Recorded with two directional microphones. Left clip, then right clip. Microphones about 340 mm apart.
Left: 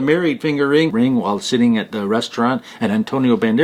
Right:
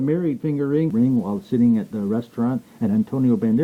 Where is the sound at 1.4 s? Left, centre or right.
Centre.